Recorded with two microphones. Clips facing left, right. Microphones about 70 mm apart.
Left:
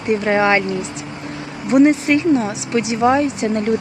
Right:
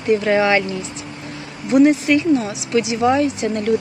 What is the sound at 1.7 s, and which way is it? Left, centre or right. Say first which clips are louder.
Speech: left 1 dB; left.